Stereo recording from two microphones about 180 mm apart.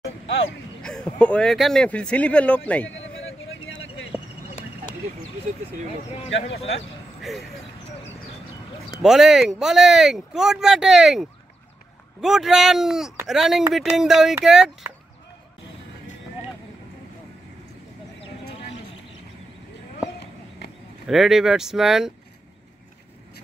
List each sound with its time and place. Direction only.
0.8 s speech: 5° left (ahead or behind)
2.9 s a sound: 90° left
7.2 s speech: centre (ahead or behind)
9.0 s speech: 5° right (ahead or behind)
20.2 s a sound: 70° left (ahead or behind)
21.1 s speech: centre (ahead or behind)